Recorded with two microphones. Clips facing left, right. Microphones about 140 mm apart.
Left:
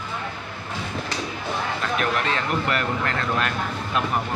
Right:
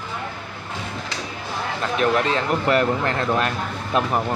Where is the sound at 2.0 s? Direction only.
25° right (ahead or behind).